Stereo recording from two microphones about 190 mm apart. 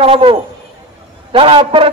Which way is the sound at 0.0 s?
30° right (ahead or behind).